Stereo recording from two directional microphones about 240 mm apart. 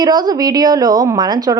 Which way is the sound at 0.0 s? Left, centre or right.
Centre.